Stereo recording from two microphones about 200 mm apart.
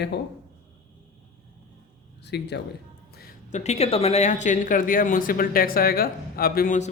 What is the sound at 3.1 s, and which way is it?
Music, 50° left (ahead or behind).